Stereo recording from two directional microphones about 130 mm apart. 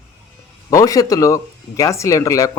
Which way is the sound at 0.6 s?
25° left (ahead or behind).